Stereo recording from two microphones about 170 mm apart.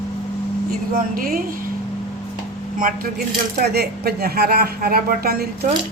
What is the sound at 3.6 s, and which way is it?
Speech, 70° right (ahead or behind).